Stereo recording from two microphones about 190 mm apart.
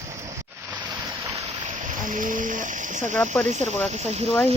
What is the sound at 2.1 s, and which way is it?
Speech, 45° right (ahead or behind).